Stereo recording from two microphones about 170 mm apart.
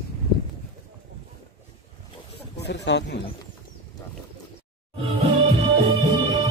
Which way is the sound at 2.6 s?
90° left.